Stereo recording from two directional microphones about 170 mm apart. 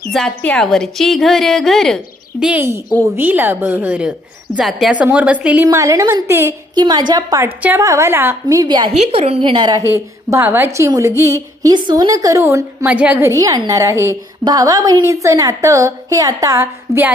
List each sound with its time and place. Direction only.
0.1 s a woman's voice: 5° left (ahead or behind)
2.4 s a woman's voice: 10° right (ahead or behind)
5.6 s a woman's voice: 20° right (ahead or behind)
6.7 s a woman's voice: 25° right (ahead or behind)
8.9 s a woman's voice: 40° right (ahead or behind); by 17.2 s 10° right (ahead or behind)